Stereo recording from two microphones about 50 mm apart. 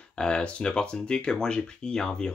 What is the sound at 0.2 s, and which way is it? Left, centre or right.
Speech, centre.